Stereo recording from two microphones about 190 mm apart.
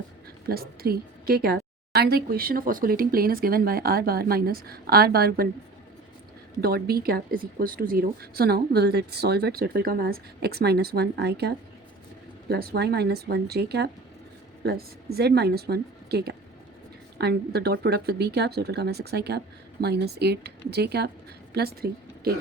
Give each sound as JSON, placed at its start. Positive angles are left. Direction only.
{"t": 0.4, "sound": "a woman's voice", "side_deg": -50}
{"t": 6.6, "sound": "speech", "side_deg": -55}